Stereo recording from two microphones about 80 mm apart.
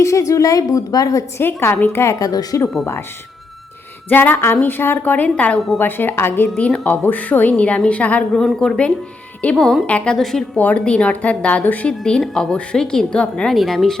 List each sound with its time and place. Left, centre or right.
0.0 s a woman's voice: left
1.4 s a woman's voice: left
4.1 s a woman's voice: left
5.5 s a woman's voice: centre
5.8 s a woman's voice: left
6.6 s a woman's voice: centre
8.4 s a woman's voice: centre
10.6 s a woman's voice: centre
13.5 s a woman's voice: centre